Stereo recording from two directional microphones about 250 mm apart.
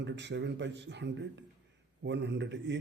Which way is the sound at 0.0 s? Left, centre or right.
Right.